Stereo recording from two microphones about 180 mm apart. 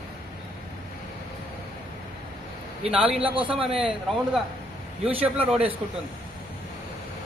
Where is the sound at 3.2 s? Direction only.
30° right (ahead or behind).